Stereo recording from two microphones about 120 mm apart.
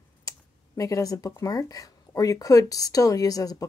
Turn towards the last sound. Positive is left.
turn(degrees=30)  # may be behind; listen again after turning